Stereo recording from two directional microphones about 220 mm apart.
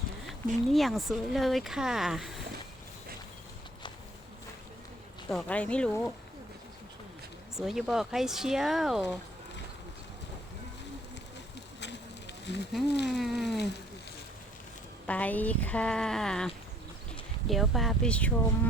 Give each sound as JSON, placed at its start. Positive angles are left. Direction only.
{"t": 0.3, "sound": "speech", "side_deg": 0}
{"t": 5.3, "sound": "speech", "side_deg": 5}
{"t": 7.5, "sound": "speech", "side_deg": 0}
{"t": 12.5, "sound": "speech", "side_deg": 50}
{"t": 13.1, "sound": "speech", "side_deg": 0}
{"t": 15.0, "sound": "speech", "side_deg": 5}
{"t": 17.5, "sound": "speech", "side_deg": 0}